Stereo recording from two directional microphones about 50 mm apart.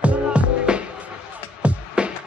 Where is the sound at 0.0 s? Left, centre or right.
Right.